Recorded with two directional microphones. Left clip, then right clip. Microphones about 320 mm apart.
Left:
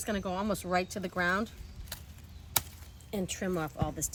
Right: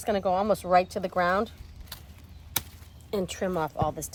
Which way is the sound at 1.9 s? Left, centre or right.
Centre.